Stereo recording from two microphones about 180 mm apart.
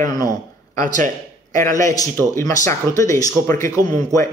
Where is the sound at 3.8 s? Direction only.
45° right (ahead or behind).